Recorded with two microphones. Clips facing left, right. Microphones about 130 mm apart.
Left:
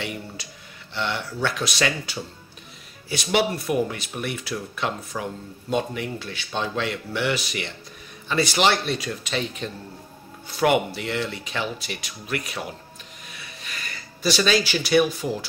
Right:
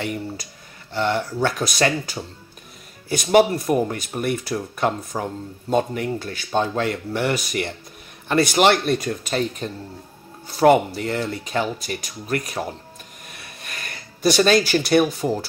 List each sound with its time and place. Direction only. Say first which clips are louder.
0.9 s speech: right 6 dB; 40° right (ahead or behind)